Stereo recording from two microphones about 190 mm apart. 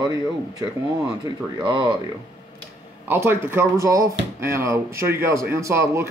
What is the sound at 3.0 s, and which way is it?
A man's voice, 10° right (ahead or behind).